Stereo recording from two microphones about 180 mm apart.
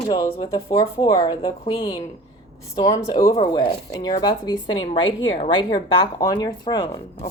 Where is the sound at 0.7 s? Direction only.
20° left (ahead or behind).